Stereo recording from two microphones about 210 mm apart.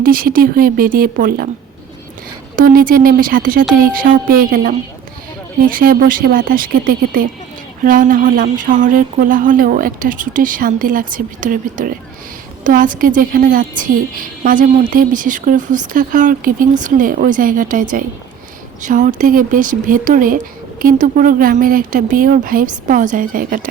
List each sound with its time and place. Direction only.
0.0 s speech: 45° right (ahead or behind)
2.6 s a woman's voice: 40° right (ahead or behind)